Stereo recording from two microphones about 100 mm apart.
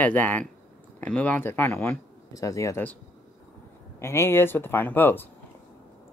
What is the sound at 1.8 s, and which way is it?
Speech, 35° left (ahead or behind).